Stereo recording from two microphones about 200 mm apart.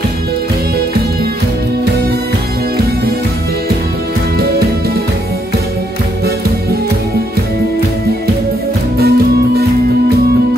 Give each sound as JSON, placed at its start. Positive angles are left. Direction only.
{"t": 4.4, "sound": "music", "side_deg": -50}
{"t": 8.9, "sound": "music", "side_deg": -55}